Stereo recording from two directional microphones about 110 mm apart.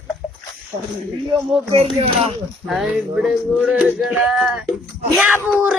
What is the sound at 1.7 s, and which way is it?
Speech, 60° right (ahead or behind).